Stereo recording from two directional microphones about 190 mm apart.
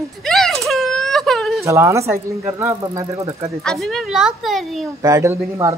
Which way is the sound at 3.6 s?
Centre (ahead or behind).